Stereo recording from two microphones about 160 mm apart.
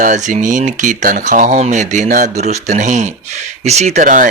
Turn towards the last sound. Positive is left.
turn(degrees=-55)  # may be behind; listen again after turning